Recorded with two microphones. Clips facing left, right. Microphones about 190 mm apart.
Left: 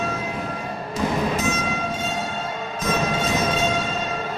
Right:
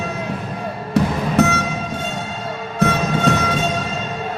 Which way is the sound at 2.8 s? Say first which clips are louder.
Right 7 dB; 65° right (ahead or behind).